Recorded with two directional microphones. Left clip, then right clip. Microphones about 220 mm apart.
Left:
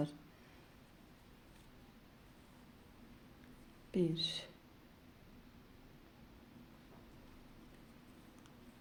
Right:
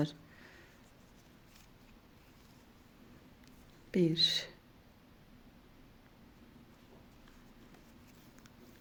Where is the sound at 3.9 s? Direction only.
30° right (ahead or behind).